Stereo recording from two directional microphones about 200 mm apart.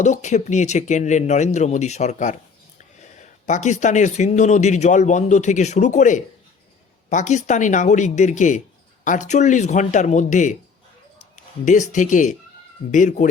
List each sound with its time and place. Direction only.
0.0 s speech: 35° left (ahead or behind)
11.6 s speech: 40° left (ahead or behind)